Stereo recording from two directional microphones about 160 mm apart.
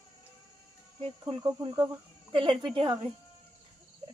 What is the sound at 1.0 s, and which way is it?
Speech, 35° right (ahead or behind).